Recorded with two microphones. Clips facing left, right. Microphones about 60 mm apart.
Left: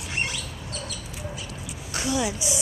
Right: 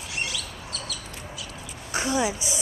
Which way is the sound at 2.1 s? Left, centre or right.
Centre.